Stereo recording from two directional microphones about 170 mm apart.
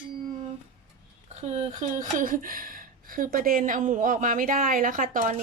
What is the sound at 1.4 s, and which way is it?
A woman's voice, 40° right (ahead or behind).